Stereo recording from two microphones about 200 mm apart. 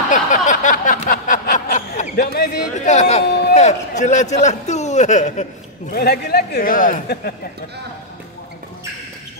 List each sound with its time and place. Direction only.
0.1 s a sound: 40° left (ahead or behind)
3.4 s a man's voice: 35° left (ahead or behind)
5.9 s a man's voice: 50° left (ahead or behind)